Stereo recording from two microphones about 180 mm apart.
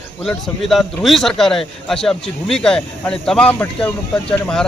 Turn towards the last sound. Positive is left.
turn(degrees=5)  # may be behind; listen again after turning